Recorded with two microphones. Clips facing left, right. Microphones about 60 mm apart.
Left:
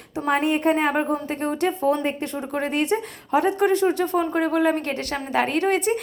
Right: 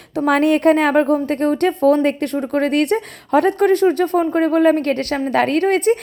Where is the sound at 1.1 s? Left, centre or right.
Right.